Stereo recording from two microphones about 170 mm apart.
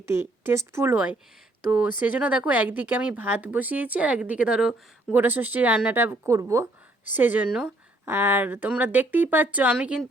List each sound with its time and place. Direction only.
0.0 s speech: 15° right (ahead or behind)